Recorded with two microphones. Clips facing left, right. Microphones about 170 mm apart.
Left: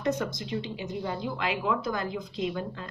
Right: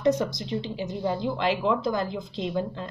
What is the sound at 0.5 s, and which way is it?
A woman's voice, 30° right (ahead or behind).